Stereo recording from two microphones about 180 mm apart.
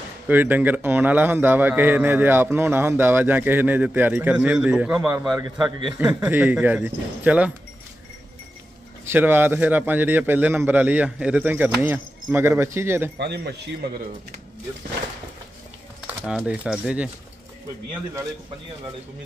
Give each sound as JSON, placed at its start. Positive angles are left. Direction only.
{"t": 0.3, "sound": "a man's voice", "side_deg": -10}
{"t": 5.3, "sound": "a man's voice", "side_deg": -20}
{"t": 5.9, "sound": "a man's voice", "side_deg": -10}
{"t": 9.0, "sound": "a man's voice", "side_deg": -10}
{"t": 13.2, "sound": "speech", "side_deg": -65}
{"t": 16.3, "sound": "speech", "side_deg": -5}